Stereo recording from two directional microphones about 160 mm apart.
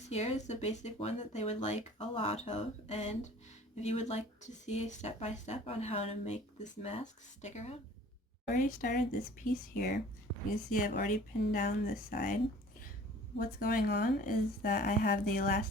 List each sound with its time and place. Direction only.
0.1 s speech: 45° left (ahead or behind)
8.5 s a woman's voice: 55° left (ahead or behind)
13.4 s a woman's voice: 65° left (ahead or behind)